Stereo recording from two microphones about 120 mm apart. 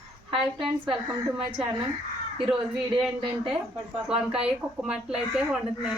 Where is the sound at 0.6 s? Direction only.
45° right (ahead or behind).